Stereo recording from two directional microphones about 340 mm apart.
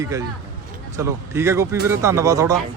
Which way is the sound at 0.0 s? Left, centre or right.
Centre.